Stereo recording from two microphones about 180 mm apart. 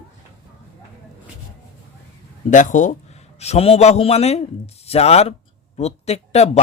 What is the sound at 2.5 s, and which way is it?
Speech, 45° left (ahead or behind).